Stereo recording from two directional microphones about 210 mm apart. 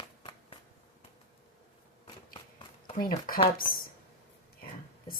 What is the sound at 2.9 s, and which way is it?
Speech, 45° left (ahead or behind).